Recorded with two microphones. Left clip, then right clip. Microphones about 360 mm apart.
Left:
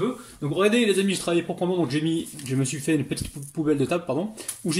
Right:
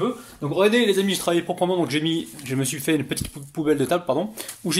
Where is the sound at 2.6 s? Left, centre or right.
Right.